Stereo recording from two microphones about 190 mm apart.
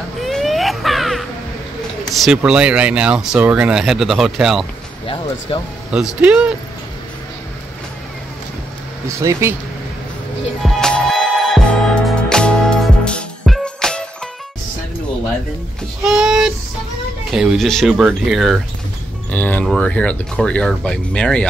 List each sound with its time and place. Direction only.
0.2 s a sound: centre (ahead or behind)
2.1 s speech: 5° right (ahead or behind)
5.0 s speech: 30° left (ahead or behind)
5.9 s speech: 5° right (ahead or behind)
9.0 s speech: 15° right (ahead or behind)
10.6 s music: centre (ahead or behind)
16.0 s speech: 5° right (ahead or behind)
19.3 s speech: 10° left (ahead or behind)